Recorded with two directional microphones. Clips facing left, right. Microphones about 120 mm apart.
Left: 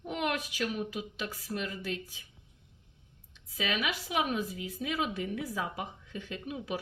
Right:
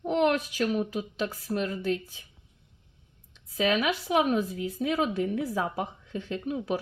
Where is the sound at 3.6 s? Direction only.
40° right (ahead or behind).